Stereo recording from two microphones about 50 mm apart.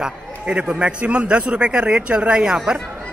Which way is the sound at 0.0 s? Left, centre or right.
Centre.